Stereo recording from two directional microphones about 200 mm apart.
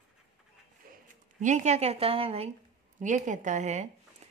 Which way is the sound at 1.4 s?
35° right (ahead or behind).